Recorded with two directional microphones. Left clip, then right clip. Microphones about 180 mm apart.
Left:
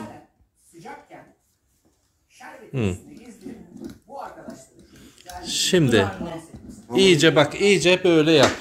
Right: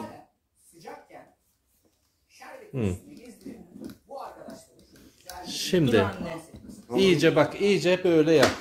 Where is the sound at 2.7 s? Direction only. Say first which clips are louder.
Left 4 dB; 5° left (ahead or behind).